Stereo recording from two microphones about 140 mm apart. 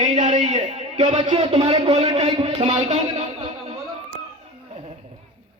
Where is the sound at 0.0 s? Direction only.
60° right (ahead or behind); by 2.9 s 35° right (ahead or behind).